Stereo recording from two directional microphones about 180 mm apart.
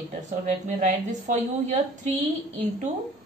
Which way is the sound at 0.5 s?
40° right (ahead or behind).